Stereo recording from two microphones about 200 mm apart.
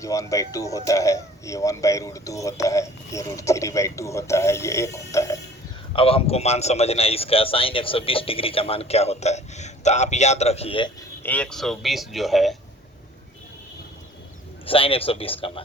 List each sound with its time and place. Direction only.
0.0 s speech: 15° left (ahead or behind)
5.9 s a man's voice: 25° left (ahead or behind)
11.2 s speech: 5° left (ahead or behind)
14.7 s a man's voice: 25° left (ahead or behind)